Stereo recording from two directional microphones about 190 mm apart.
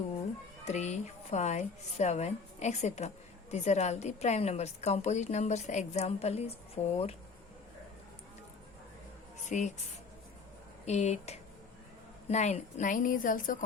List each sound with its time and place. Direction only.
0.6 s a woman's voice: 35° left (ahead or behind)
9.5 s a woman's voice: 40° left (ahead or behind)
10.8 s a woman's voice: 35° left (ahead or behind)